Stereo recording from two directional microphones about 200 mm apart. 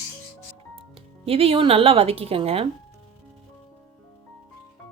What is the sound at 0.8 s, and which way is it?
Speech, 30° right (ahead or behind).